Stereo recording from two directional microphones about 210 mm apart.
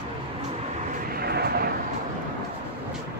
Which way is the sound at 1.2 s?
50° right (ahead or behind).